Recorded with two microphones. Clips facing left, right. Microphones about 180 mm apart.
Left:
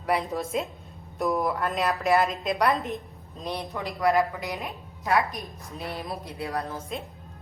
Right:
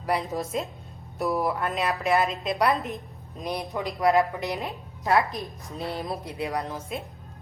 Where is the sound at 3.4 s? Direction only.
15° right (ahead or behind).